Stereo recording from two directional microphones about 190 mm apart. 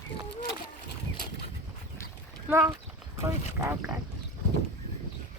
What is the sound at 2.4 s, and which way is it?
Speech, 15° right (ahead or behind).